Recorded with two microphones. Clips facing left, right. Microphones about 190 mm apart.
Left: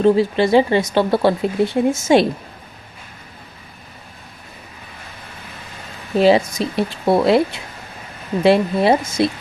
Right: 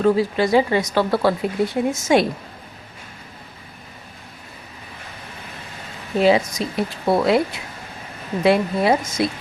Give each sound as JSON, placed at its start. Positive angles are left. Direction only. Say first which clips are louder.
{"t": 0.0, "sound": "speech", "louder": "left 3 dB", "side_deg": 25}
{"t": 6.1, "sound": "speech", "louder": "left 3 dB", "side_deg": 30}
{"t": 8.4, "sound": "speech", "louder": "left 3 dB", "side_deg": 30}